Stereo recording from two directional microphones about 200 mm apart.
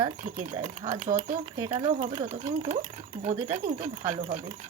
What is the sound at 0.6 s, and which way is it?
Speech, 25° right (ahead or behind).